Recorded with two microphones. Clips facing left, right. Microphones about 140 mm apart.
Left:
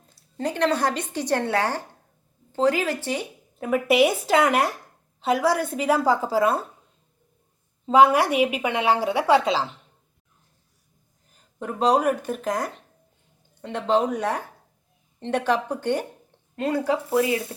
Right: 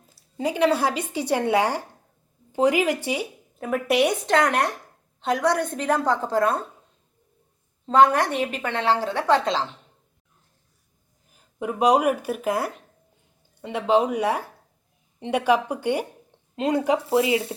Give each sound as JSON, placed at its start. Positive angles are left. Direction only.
{"t": 0.0, "sound": "a woman's voice", "side_deg": -5}
{"t": 3.6, "sound": "a woman's voice", "side_deg": 0}
{"t": 7.9, "sound": "a woman's voice", "side_deg": 10}
{"t": 11.3, "sound": "speech", "side_deg": -10}
{"t": 16.6, "sound": "speech", "side_deg": -20}